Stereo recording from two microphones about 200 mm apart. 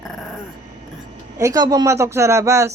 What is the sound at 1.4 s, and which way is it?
Speech, 15° right (ahead or behind).